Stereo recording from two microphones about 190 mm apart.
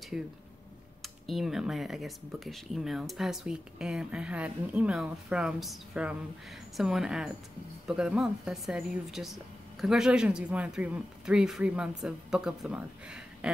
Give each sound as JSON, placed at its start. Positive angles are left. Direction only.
{"t": 0.1, "sound": "speech", "side_deg": -5}